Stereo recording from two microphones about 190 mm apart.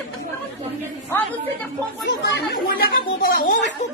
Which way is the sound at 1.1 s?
10° left (ahead or behind).